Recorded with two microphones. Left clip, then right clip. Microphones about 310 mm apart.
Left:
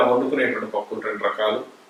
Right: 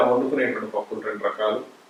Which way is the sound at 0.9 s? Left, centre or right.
Centre.